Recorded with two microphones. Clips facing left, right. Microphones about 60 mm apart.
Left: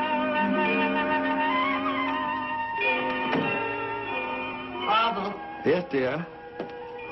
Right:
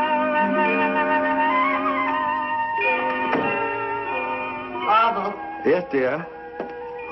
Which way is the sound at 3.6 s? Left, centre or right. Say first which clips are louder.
Right 5 dB; right.